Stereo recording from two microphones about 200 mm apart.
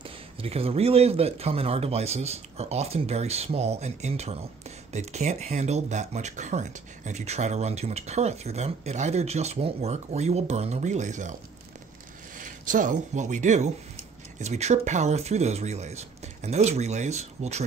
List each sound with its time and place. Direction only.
0.0 s speech: 30° right (ahead or behind)
12.4 s speech: 40° right (ahead or behind)